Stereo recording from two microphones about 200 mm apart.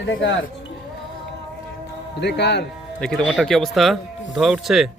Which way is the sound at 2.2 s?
55° left (ahead or behind).